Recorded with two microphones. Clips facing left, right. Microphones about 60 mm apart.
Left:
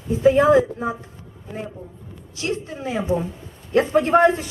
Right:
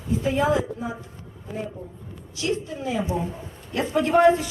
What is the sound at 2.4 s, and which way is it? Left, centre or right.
A woman's voice, left.